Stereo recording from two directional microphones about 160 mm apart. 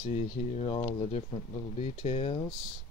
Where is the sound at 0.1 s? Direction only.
40° left (ahead or behind).